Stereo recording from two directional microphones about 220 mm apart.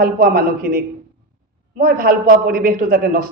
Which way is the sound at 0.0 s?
40° right (ahead or behind).